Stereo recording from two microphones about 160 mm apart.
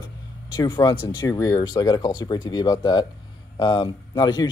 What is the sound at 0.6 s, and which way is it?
Speech, 30° left (ahead or behind).